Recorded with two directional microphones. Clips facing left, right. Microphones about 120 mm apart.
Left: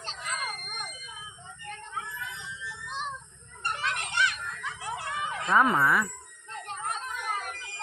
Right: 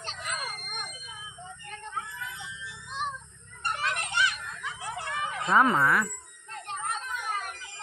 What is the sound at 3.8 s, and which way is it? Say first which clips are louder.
Children playing: even; centre (ahead or behind).